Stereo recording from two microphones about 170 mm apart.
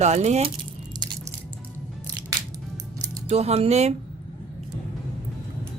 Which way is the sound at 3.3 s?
35° right (ahead or behind).